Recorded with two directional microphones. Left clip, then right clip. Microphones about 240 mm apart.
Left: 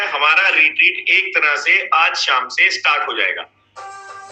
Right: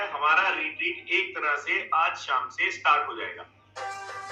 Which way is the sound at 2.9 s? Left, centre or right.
Left.